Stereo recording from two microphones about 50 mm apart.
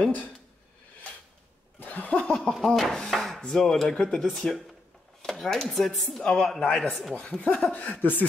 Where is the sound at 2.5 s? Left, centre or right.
Centre.